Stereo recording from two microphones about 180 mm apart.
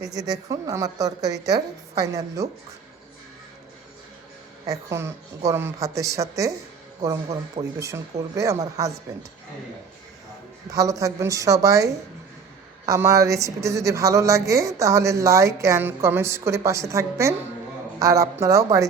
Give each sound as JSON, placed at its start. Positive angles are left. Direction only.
{"t": 0.0, "sound": "a woman's voice", "side_deg": -20}
{"t": 4.6, "sound": "speech", "side_deg": -15}
{"t": 10.7, "sound": "speech", "side_deg": -20}